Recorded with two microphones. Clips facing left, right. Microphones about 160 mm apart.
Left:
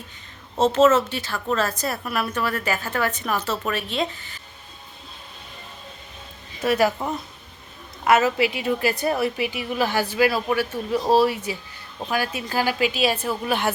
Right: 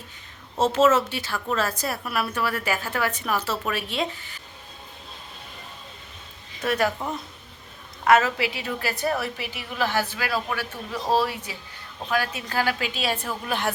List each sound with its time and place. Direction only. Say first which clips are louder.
0.6 s a woman's voice: left 3 dB; 10° right (ahead or behind)
6.6 s a woman's voice: left 4 dB; 10° left (ahead or behind)
8.0 s a woman's voice: left 1 dB; 10° left (ahead or behind)